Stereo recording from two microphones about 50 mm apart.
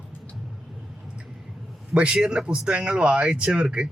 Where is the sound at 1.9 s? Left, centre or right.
Centre.